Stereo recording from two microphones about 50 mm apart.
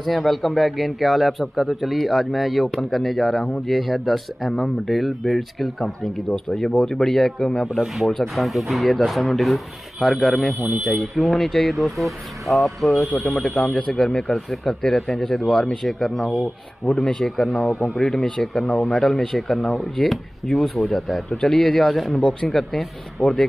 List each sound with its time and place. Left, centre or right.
0.0 s a man's voice: centre
7.6 s speech: centre
10.6 s speech: right
11.0 s a man's voice: centre
13.8 s a man's voice: centre
15.4 s a man's voice: centre
15.8 s speech: centre
16.9 s a man's voice: centre